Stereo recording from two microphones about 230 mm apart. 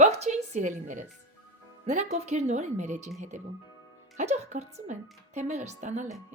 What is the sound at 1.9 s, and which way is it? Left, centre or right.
A woman's voice, right.